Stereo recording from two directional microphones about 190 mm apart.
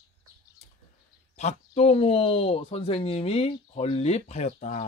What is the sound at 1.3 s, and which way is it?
Speech, 35° left (ahead or behind).